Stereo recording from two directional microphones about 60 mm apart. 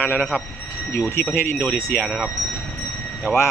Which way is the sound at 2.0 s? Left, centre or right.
Centre.